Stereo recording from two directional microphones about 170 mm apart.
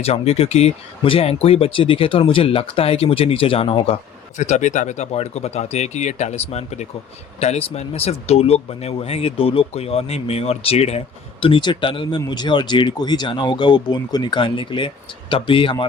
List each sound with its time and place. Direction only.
0.0 s speech: 35° left (ahead or behind)
4.4 s speech: 45° left (ahead or behind)